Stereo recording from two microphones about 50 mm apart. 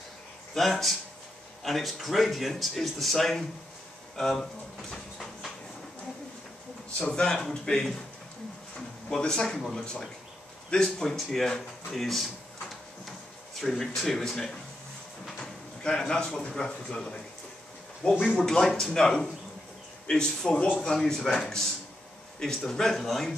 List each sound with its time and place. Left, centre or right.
0.6 s a man's voice: centre
4.9 s a sound: centre
7.0 s a man's voice: centre
9.2 s a man's voice: centre
10.7 s a man's voice: centre
11.9 s a sound: centre
13.6 s a man's voice: centre
15.8 s a man's voice: centre
18.2 s a man's voice: centre